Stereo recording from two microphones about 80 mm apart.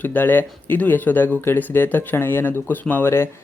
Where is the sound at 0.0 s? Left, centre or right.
Left.